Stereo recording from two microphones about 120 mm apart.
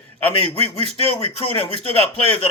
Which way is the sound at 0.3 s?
55° left (ahead or behind).